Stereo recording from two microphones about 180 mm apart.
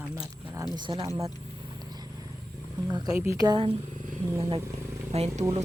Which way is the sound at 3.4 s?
20° right (ahead or behind).